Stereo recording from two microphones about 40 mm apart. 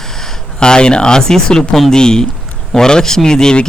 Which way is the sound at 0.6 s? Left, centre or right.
Left.